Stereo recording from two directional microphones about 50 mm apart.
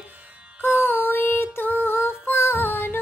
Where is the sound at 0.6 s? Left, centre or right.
Left.